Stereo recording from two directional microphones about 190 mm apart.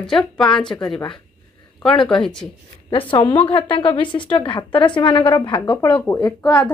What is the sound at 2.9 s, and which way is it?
A woman's voice, 25° left (ahead or behind).